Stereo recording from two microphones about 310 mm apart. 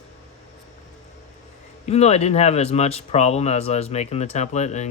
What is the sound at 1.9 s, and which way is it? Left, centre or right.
Speech, left.